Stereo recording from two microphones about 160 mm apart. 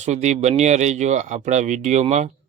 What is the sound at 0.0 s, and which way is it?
Speech, 45° right (ahead or behind).